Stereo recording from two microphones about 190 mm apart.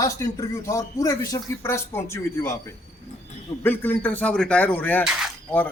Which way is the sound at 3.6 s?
10° left (ahead or behind).